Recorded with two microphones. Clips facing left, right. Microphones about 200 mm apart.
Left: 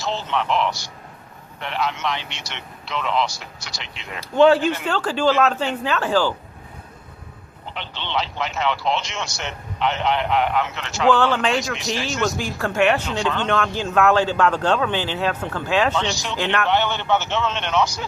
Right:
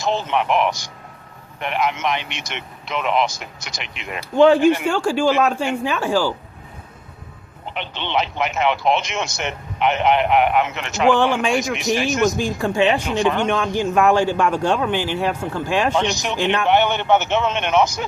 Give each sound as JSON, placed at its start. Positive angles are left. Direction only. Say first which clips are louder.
{"t": 0.0, "sound": "a man's voice", "louder": "right 4 dB", "side_deg": -15}
{"t": 7.7, "sound": "a man's voice", "louder": "right 4 dB", "side_deg": -15}